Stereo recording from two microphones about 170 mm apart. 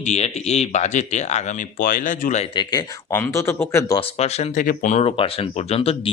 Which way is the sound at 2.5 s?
20° left (ahead or behind).